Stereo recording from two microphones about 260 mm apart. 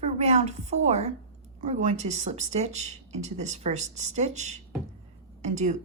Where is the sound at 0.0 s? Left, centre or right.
Right.